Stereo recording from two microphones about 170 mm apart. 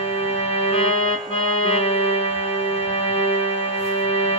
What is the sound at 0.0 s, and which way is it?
Organ, 35° left (ahead or behind).